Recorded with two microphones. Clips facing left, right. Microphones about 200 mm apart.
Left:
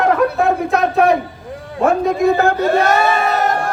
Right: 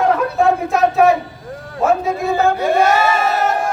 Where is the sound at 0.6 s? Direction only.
Centre (ahead or behind).